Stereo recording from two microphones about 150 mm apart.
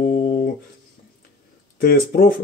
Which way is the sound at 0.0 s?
75° left (ahead or behind).